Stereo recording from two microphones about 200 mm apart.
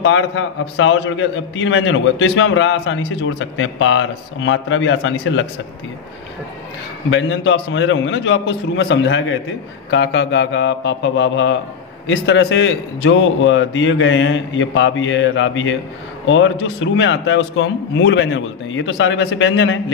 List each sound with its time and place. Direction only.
0.0 s a man's voice: 70° left (ahead or behind)
7.1 s a man's voice: 75° left (ahead or behind)